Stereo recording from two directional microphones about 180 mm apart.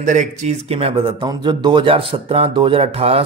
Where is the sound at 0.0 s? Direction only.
45° right (ahead or behind).